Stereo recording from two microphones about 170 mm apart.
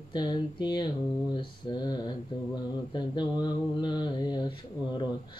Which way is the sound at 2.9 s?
25° left (ahead or behind).